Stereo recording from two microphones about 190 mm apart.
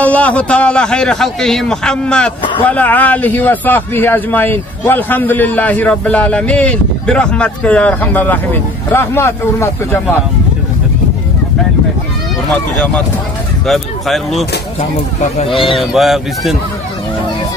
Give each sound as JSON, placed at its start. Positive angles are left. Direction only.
{"t": 0.0, "sound": "a man's voice", "side_deg": 5}
{"t": 13.7, "sound": "a man's voice", "side_deg": 0}
{"t": 14.8, "sound": "speech", "side_deg": 30}
{"t": 15.6, "sound": "a man's voice", "side_deg": 0}